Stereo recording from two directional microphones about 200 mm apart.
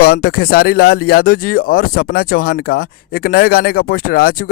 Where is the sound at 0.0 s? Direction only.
50° left (ahead or behind).